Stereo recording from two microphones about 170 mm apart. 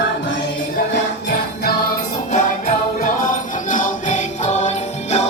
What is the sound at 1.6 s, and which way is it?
Music, 70° left (ahead or behind).